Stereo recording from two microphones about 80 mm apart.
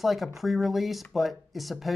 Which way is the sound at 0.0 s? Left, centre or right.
Centre.